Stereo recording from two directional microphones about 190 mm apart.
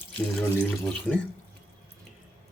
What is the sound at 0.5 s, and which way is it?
Speech, 5° left (ahead or behind).